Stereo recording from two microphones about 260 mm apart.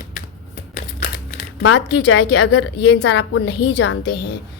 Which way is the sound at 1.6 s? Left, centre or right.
Left.